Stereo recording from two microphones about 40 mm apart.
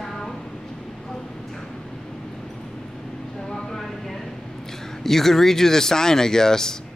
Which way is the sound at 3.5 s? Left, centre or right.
Centre.